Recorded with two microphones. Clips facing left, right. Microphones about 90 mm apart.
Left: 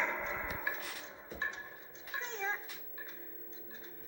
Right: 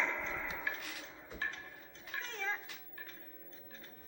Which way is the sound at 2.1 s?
20° left (ahead or behind).